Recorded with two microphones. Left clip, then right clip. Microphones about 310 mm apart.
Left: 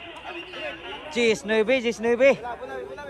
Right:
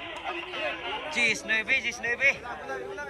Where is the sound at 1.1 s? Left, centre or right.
Centre.